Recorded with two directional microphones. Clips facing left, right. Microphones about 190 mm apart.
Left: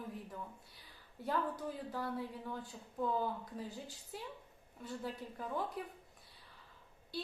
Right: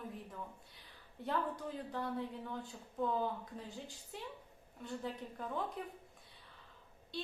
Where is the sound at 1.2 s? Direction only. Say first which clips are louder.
Left 1 dB; 5° left (ahead or behind).